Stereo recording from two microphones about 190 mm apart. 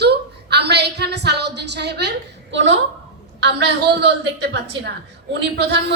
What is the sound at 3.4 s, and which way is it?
Speech, 60° right (ahead or behind).